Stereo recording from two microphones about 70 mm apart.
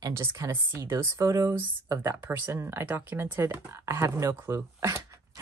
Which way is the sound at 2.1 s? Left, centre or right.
Right.